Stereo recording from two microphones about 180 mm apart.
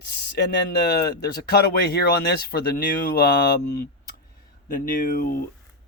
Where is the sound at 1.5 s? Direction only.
60° left (ahead or behind).